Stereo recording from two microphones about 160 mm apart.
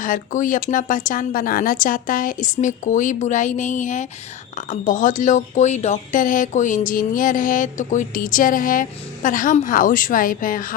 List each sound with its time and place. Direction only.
0.0 s speech: 55° left (ahead or behind)